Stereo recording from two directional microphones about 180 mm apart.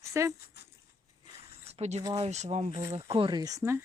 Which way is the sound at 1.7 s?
40° right (ahead or behind).